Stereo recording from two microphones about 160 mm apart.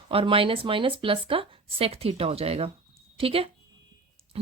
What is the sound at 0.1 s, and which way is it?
A woman's voice, 35° right (ahead or behind).